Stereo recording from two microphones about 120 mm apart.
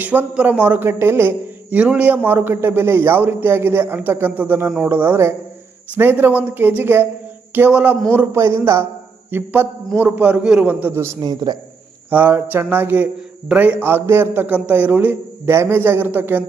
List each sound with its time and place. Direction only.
0.0 s a man's voice: 15° right (ahead or behind)
11.2 s a man's voice: 35° right (ahead or behind)
12.1 s a man's voice: 15° right (ahead or behind)